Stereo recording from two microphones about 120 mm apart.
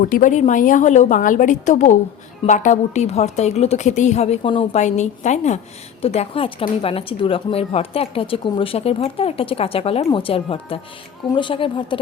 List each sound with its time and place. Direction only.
0.2 s a woman's voice: 90° left
2.5 s a woman's voice: 80° left
6.0 s speech: 55° left (ahead or behind)